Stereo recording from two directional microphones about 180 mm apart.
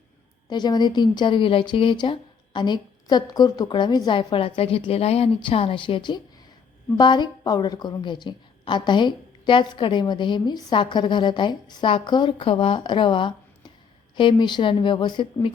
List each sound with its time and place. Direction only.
0.5 s a woman's voice: 25° left (ahead or behind)